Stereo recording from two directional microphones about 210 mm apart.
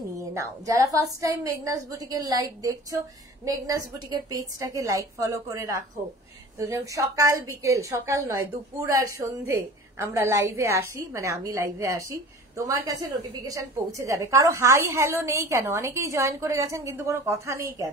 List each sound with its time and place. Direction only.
0.2 s a woman's voice: 15° right (ahead or behind)
13.5 s a woman's voice: 15° right (ahead or behind)